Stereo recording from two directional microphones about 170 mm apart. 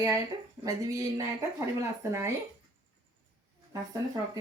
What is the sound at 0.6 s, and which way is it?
Speech, 20° right (ahead or behind).